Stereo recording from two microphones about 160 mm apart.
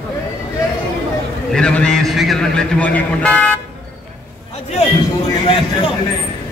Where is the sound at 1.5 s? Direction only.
5° left (ahead or behind).